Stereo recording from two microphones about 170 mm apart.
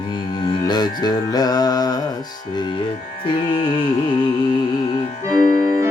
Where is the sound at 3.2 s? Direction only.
30° left (ahead or behind).